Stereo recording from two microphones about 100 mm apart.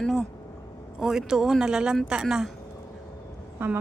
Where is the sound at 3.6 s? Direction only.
20° right (ahead or behind).